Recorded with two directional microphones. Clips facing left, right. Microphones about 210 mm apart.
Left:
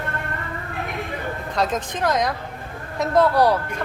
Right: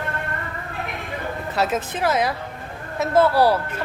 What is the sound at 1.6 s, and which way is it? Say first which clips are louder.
A woman's voice: right 1 dB; 5° right (ahead or behind).